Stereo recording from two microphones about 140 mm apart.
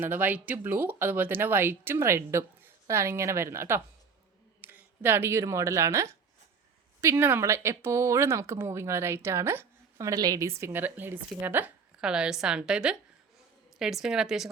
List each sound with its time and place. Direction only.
0.0 s speech: 15° right (ahead or behind)